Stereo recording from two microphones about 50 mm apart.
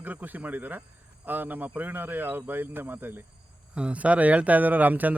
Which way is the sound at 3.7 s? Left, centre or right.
Right.